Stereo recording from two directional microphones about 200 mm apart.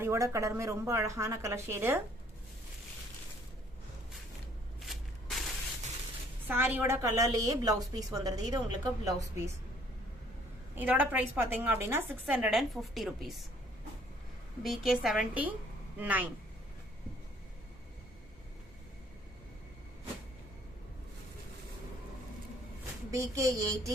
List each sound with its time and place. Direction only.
0.0 s a woman's voice: 15° right (ahead or behind)
4.8 s shuffling cards: centre (ahead or behind)
6.5 s a woman's voice: 10° right (ahead or behind)
10.8 s a woman's voice: 10° right (ahead or behind)
14.6 s a woman's voice: centre (ahead or behind)
23.1 s a woman's voice: 15° right (ahead or behind)